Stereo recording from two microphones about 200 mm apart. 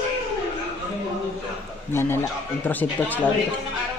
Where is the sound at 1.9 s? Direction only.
10° left (ahead or behind).